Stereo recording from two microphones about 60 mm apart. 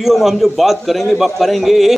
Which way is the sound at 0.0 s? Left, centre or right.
Centre.